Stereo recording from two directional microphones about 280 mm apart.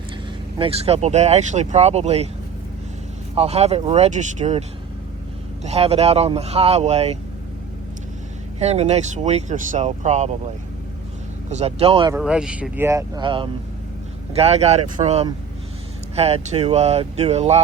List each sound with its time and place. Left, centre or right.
0.6 s speech: right
3.3 s speech: right
5.6 s speech: right
8.5 s speech: right
11.4 s speech: right
12.1 s speech: centre; by 17.6 s right